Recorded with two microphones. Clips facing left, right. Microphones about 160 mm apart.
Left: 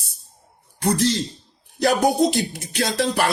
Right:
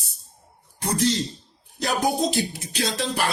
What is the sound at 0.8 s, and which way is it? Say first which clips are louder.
A man's voice: left 3 dB; 65° left (ahead or behind).